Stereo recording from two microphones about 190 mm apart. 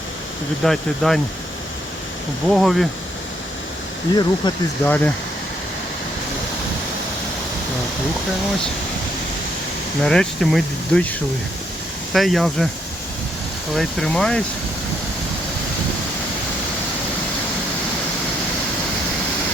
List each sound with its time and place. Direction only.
0.6 s speech: centre (ahead or behind)
2.5 s speech: centre (ahead or behind)
4.1 s speech: 20° left (ahead or behind)
4.9 s speech: 10° left (ahead or behind)
10.0 s speech: 5° left (ahead or behind)
12.1 s speech: centre (ahead or behind)
13.7 s speech: 5° left (ahead or behind)